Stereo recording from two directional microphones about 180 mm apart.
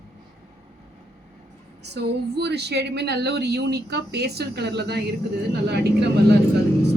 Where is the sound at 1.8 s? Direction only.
70° right (ahead or behind).